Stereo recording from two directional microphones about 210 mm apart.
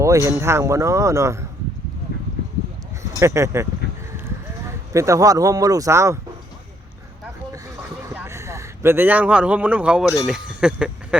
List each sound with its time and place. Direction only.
0.0 s speech: 15° right (ahead or behind)
3.2 s speech: 15° right (ahead or behind)
8.1 s speech: 10° right (ahead or behind)